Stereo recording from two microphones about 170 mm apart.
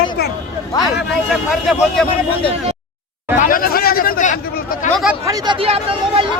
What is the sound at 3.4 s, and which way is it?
Chatter, 55° left (ahead or behind).